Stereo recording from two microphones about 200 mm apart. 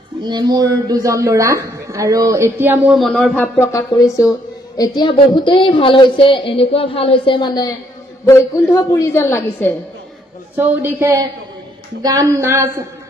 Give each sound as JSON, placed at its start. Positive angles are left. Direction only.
{"t": 0.2, "sound": "a woman's voice", "side_deg": -20}
{"t": 3.0, "sound": "a woman's voice", "side_deg": 0}
{"t": 10.5, "sound": "a woman's voice", "side_deg": -10}